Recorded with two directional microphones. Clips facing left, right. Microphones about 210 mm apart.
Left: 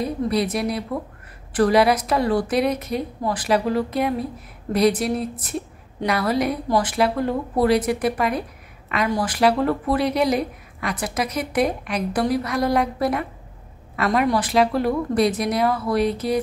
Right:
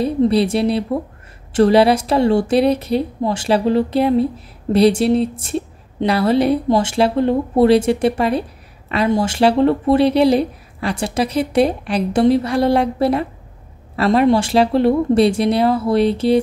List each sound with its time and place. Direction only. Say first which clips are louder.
0.0 s a woman's voice: right 7 dB; 30° right (ahead or behind)